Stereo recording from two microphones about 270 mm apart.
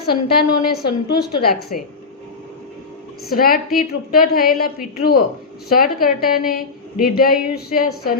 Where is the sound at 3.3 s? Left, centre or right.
Left.